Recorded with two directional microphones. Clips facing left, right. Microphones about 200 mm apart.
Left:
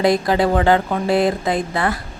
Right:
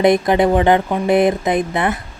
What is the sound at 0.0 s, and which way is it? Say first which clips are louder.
Speech: right 3 dB; 20° right (ahead or behind).